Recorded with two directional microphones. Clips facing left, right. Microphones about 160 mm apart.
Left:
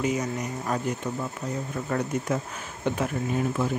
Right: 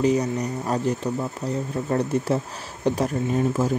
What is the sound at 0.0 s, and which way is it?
Speech, 35° right (ahead or behind).